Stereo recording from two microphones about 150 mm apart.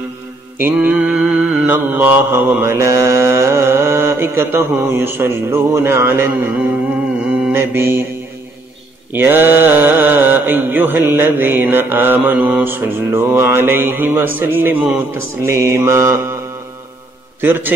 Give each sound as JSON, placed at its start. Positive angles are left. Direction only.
{"t": 0.6, "sound": "mantra", "side_deg": -10}
{"t": 9.1, "sound": "mantra", "side_deg": -15}
{"t": 17.4, "sound": "mantra", "side_deg": -15}